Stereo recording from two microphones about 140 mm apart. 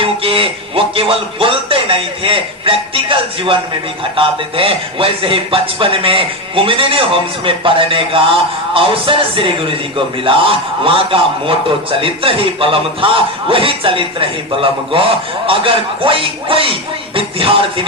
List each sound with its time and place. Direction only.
0.0 s speech: 40° right (ahead or behind)